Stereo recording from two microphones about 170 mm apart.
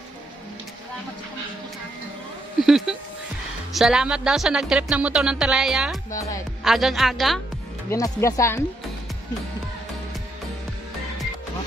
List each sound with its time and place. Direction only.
2.6 s speech: centre (ahead or behind)
7.9 s speech: 20° left (ahead or behind)